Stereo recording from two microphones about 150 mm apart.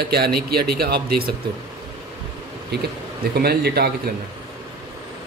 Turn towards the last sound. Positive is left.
turn(degrees=-90)